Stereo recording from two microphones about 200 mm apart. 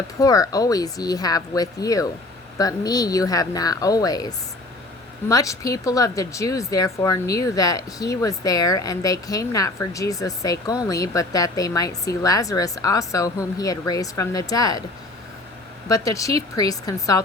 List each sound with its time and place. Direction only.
0.2 s speech: 15° left (ahead or behind)
15.9 s speech: 15° left (ahead or behind)